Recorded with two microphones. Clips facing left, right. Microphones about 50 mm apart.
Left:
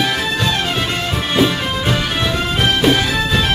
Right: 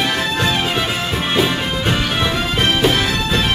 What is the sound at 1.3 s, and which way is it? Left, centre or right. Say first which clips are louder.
Music: left 3 dB; centre.